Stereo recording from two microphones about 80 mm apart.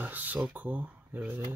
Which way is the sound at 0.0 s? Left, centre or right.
Right.